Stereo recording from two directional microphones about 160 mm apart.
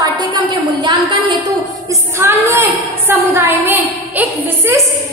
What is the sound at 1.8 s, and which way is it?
A woman's voice, 15° right (ahead or behind).